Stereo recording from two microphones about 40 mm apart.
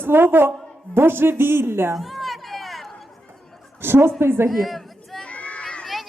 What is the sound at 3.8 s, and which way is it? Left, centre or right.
Speech, right.